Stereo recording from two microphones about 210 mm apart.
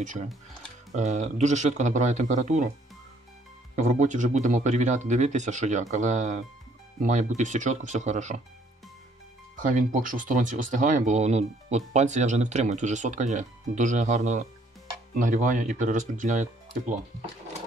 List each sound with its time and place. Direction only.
0.9 s speech: 35° right (ahead or behind)
3.7 s speech: 35° right (ahead or behind)
9.6 s speech: 40° right (ahead or behind)